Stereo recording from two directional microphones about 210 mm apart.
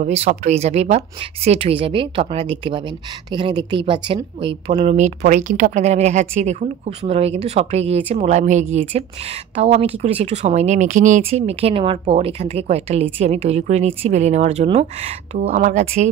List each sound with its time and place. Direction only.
0.0 s a woman's voice: 30° right (ahead or behind)